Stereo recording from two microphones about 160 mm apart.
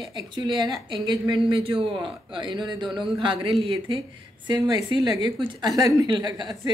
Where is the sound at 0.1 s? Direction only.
25° right (ahead or behind).